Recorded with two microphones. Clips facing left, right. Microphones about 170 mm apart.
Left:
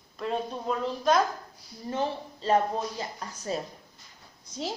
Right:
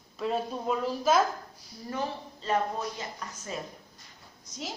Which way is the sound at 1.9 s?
30° left (ahead or behind).